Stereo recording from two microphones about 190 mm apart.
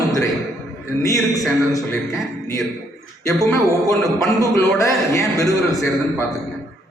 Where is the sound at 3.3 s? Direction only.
15° left (ahead or behind).